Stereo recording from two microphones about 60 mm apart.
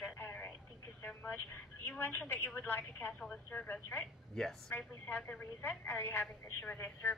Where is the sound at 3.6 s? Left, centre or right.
Left.